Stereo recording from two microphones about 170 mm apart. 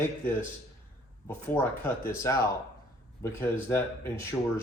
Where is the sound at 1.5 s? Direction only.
15° left (ahead or behind).